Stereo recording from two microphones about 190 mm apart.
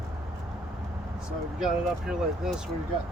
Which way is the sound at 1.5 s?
Centre (ahead or behind).